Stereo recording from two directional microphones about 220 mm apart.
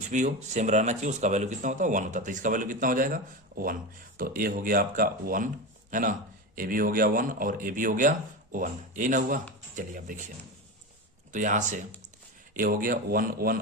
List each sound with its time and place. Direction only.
0.1 s a man's voice: 35° right (ahead or behind)
11.3 s a man's voice: 35° right (ahead or behind)